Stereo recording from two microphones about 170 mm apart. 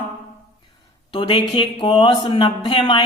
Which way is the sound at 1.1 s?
30° left (ahead or behind).